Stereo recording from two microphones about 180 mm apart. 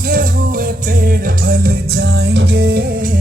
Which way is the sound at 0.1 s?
50° right (ahead or behind).